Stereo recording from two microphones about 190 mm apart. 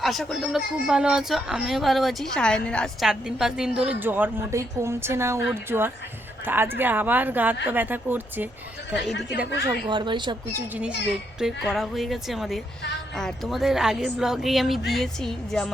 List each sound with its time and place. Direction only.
0.0 s speech: centre (ahead or behind)
9.6 s speech: 25° right (ahead or behind)
10.5 s speech: 5° right (ahead or behind)